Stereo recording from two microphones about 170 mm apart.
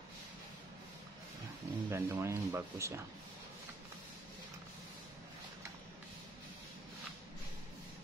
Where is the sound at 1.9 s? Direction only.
15° right (ahead or behind).